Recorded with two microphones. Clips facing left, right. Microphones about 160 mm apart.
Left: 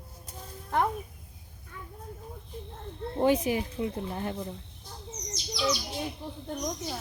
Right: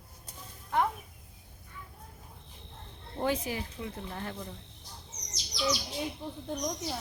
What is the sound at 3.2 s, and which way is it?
Speech, 20° left (ahead or behind).